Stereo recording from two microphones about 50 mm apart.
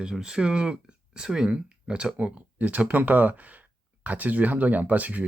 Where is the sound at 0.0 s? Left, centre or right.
Centre.